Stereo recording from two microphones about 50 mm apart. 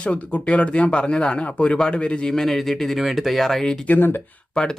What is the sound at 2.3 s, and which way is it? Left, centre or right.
Speech, centre.